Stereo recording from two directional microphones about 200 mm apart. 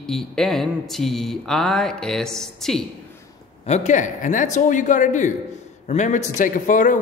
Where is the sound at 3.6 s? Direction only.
35° left (ahead or behind).